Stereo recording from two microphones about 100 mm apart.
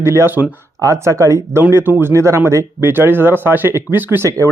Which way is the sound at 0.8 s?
30° right (ahead or behind).